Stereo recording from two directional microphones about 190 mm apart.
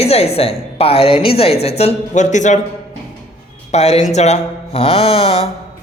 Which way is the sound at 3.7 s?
35° left (ahead or behind).